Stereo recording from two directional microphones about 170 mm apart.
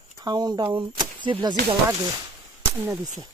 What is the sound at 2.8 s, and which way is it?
Speech, 15° right (ahead or behind).